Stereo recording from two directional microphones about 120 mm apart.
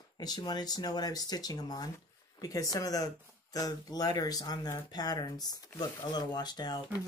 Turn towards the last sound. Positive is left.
turn(degrees=35)  # may be behind; listen again after turning